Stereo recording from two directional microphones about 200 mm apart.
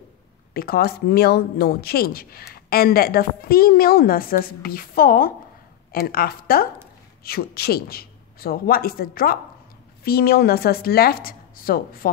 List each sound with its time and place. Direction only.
0.5 s a woman's voice: 50° left (ahead or behind)